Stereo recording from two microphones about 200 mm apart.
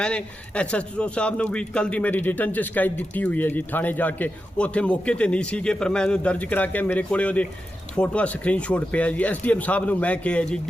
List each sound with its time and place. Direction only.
0.0 s speech: 5° left (ahead or behind)